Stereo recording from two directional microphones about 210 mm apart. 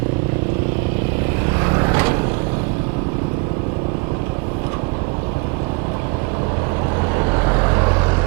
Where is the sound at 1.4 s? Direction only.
20° right (ahead or behind).